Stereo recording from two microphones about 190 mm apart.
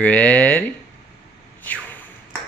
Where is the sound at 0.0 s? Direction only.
10° left (ahead or behind).